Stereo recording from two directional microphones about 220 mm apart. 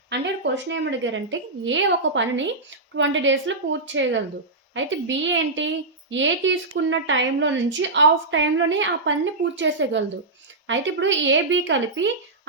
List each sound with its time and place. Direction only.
0.1 s a woman's voice: 55° right (ahead or behind)